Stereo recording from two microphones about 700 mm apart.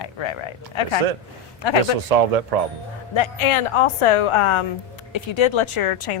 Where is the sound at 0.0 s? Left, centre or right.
Left.